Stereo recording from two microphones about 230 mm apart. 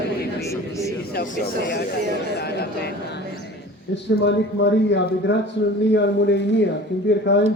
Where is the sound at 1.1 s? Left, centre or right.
Left.